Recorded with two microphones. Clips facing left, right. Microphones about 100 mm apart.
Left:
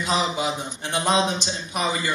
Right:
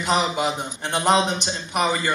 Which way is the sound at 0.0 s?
60° right (ahead or behind).